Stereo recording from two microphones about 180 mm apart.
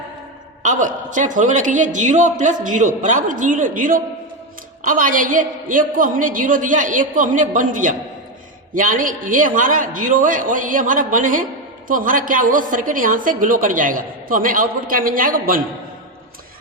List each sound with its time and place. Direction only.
0.6 s a woman's voice: 45° right (ahead or behind)